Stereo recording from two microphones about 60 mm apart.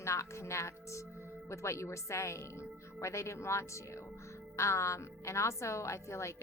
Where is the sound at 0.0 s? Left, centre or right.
Left.